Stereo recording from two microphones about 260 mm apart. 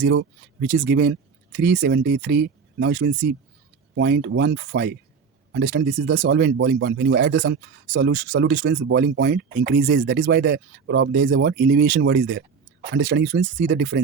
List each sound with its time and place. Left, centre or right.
0.0 s speech: right